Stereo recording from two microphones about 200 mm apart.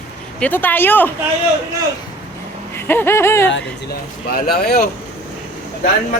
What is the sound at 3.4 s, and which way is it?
Speech, 55° left (ahead or behind).